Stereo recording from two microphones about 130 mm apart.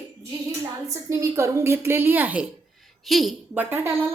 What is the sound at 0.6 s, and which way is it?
A woman's voice, 25° right (ahead or behind).